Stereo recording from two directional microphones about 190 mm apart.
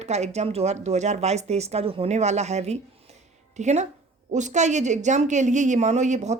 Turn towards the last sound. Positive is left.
turn(degrees=-35)  # may be behind; listen again after turning